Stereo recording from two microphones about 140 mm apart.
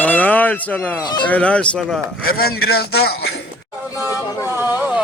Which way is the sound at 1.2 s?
10° left (ahead or behind).